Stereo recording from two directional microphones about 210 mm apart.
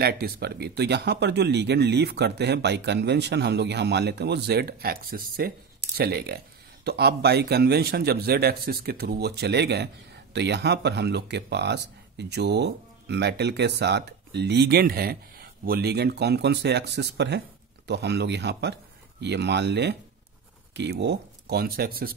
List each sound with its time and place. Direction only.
0.0 s speech: 50° right (ahead or behind)